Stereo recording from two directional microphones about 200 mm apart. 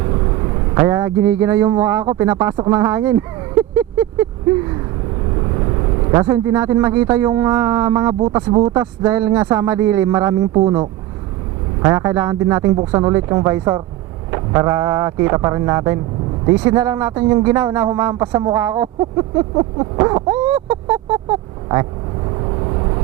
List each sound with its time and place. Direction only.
0.7 s speech: 15° right (ahead or behind)
6.1 s speech: 15° right (ahead or behind)
22.4 s vehicle: 25° right (ahead or behind)